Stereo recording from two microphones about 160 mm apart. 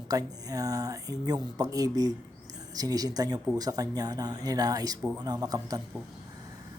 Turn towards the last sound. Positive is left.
turn(degrees=-25)  # may be behind; listen again after turning